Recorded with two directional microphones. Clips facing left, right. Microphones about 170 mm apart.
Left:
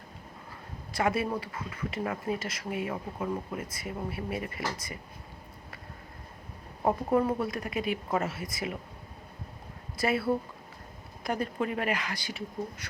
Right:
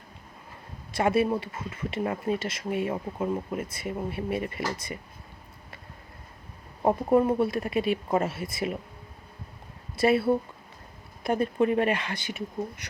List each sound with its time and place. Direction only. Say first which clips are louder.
0.9 s speech: right 5 dB; 25° right (ahead or behind)
6.8 s speech: right 4 dB; 25° right (ahead or behind)
10.0 s speech: right 5 dB; 25° right (ahead or behind)